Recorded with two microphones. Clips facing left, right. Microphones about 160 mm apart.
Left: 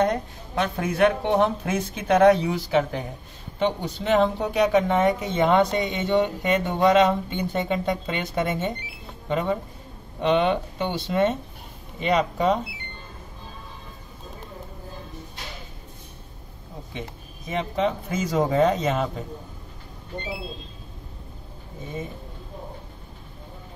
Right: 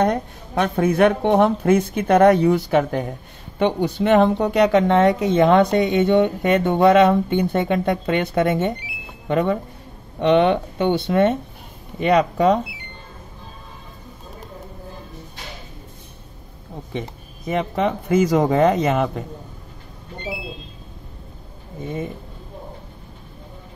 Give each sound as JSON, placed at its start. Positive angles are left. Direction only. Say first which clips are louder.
{"t": 0.0, "sound": "speech", "louder": "right 3 dB", "side_deg": -60}
{"t": 17.5, "sound": "speech", "louder": "right 4 dB", "side_deg": -60}